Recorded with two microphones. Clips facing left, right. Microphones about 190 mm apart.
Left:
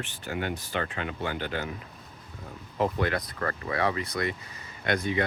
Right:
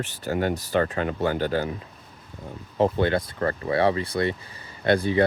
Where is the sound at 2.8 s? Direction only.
30° right (ahead or behind).